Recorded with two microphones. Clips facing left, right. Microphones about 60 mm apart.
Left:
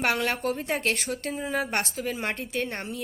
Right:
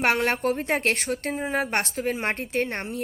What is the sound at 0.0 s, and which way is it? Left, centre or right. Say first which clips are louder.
Speech: right 3 dB; right.